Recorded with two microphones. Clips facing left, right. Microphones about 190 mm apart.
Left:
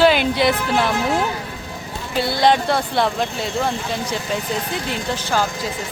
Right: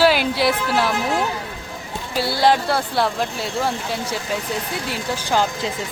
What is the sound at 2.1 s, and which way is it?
Speech, 5° right (ahead or behind).